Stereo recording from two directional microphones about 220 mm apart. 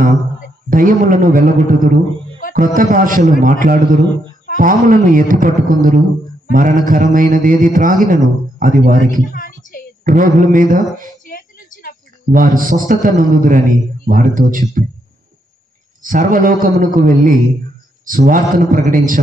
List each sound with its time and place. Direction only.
0.7 s a man's voice: 40° right (ahead or behind)
9.2 s a sound: 35° left (ahead or behind)
10.0 s a man's voice: 40° right (ahead or behind)
11.2 s a sound: 40° left (ahead or behind)
12.3 s a man's voice: 40° right (ahead or behind)
16.0 s a man's voice: 40° right (ahead or behind)